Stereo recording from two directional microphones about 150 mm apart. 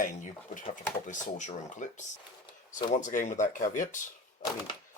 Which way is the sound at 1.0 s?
55° left (ahead or behind).